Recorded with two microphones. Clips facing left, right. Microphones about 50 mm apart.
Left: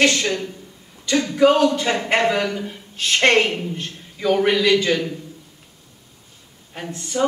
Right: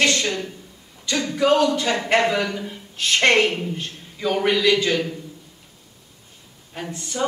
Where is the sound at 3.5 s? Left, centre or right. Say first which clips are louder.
Even; centre.